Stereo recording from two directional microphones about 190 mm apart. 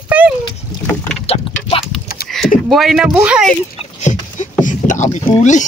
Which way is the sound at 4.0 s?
40° left (ahead or behind).